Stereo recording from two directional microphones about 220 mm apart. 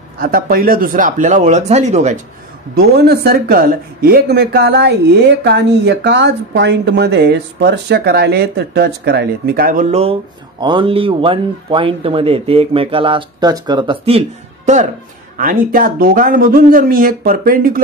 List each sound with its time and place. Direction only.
0.2 s speech: 40° right (ahead or behind)
2.7 s speech: 45° right (ahead or behind); by 14.2 s 25° right (ahead or behind)
15.3 s speech: 40° right (ahead or behind)